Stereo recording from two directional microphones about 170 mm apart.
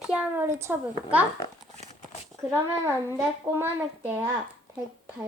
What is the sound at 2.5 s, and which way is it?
Speech, 15° right (ahead or behind).